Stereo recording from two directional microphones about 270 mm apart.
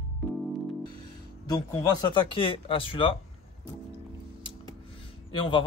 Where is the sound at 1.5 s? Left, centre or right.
Centre.